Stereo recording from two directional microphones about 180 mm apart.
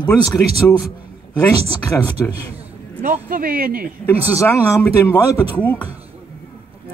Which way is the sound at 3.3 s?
55° right (ahead or behind).